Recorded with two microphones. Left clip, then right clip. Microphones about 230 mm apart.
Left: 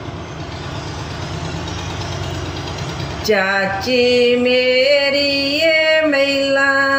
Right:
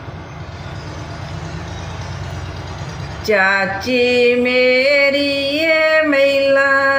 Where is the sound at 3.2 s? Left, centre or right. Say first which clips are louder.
Right 2 dB; centre.